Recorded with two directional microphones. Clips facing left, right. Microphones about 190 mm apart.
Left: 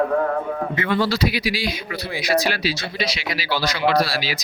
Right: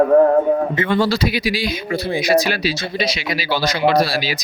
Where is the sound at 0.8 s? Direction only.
25° right (ahead or behind).